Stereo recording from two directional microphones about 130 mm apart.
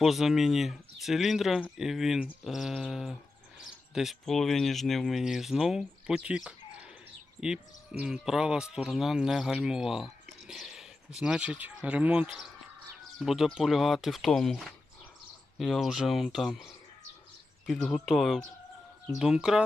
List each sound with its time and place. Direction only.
0.0 s speech: centre (ahead or behind)
17.7 s speech: 5° left (ahead or behind)